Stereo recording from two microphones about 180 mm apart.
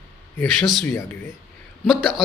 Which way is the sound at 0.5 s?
Centre (ahead or behind).